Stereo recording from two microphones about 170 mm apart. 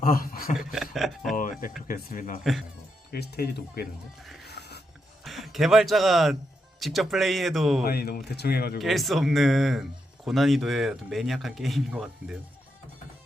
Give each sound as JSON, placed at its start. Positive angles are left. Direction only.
{"t": 0.0, "sound": "speech", "side_deg": 55}
{"t": 0.7, "sound": "music", "side_deg": 0}
{"t": 1.4, "sound": "a sound", "side_deg": 50}
{"t": 1.9, "sound": "speech", "side_deg": 55}
{"t": 2.4, "sound": "speech", "side_deg": 0}
{"t": 3.1, "sound": "speech", "side_deg": 65}
{"t": 5.2, "sound": "speech", "side_deg": 0}
{"t": 7.9, "sound": "speech", "side_deg": 65}
{"t": 8.8, "sound": "speech", "side_deg": 0}